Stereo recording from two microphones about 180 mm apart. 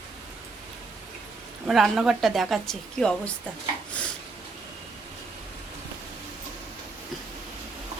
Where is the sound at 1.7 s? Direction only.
Centre (ahead or behind).